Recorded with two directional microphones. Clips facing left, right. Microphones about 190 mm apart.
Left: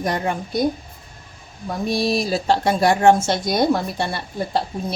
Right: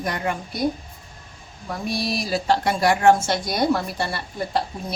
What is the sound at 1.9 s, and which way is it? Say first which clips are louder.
Speech: left 5 dB; 25° left (ahead or behind).